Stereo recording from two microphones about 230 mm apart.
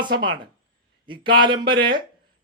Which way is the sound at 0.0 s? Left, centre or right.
Centre.